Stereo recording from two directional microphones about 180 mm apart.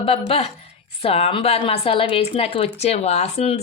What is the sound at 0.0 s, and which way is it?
A woman's voice, 30° left (ahead or behind).